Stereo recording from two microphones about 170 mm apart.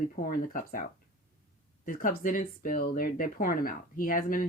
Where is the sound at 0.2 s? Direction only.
55° left (ahead or behind).